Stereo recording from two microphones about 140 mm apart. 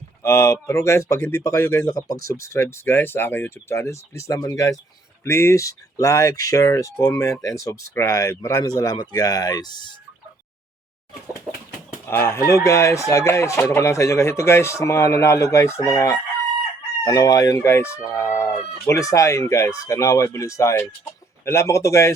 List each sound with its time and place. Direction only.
0.2 s speech: 20° left (ahead or behind)
12.0 s speech: 15° left (ahead or behind)